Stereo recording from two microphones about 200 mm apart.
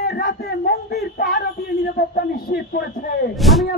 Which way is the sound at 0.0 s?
50° left (ahead or behind).